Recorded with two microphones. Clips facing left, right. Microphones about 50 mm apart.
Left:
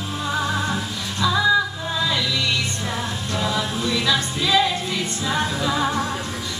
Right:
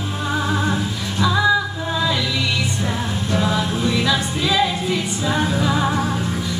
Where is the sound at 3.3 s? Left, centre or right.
Centre.